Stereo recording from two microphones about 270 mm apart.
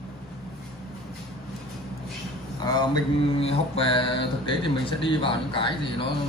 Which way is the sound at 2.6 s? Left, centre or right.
Centre.